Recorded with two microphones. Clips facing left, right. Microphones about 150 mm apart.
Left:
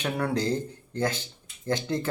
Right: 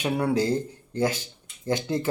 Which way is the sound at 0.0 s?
10° right (ahead or behind).